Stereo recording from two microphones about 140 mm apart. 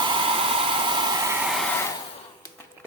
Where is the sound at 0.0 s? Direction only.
35° right (ahead or behind).